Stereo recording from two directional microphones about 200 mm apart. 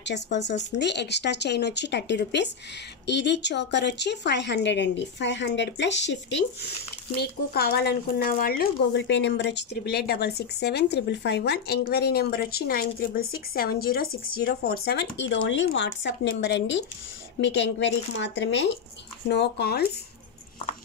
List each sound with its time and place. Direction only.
0.0 s speech: 60° left (ahead or behind)
7.2 s speech: 50° left (ahead or behind)